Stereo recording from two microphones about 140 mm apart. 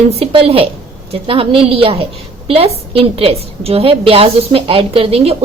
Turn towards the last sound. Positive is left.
turn(degrees=-45)  # may be behind; listen again after turning